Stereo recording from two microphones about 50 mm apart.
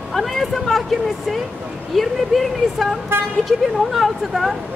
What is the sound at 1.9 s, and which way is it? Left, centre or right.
Speech, centre.